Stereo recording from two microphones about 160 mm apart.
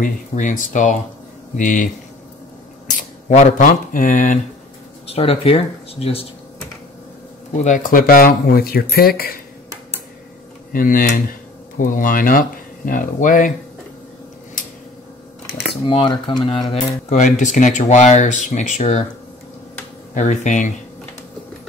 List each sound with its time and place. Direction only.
0.0 s speech: 55° left (ahead or behind)
2.9 s speech: 50° left (ahead or behind)
5.1 s speech: 35° left (ahead or behind)
7.5 s speech: 50° left (ahead or behind); by 9.3 s 70° left (ahead or behind)
10.7 s speech: 60° left (ahead or behind)
15.9 s speech: 30° left (ahead or behind)
17.1 s speech: 50° left (ahead or behind)
20.2 s speech: 50° left (ahead or behind)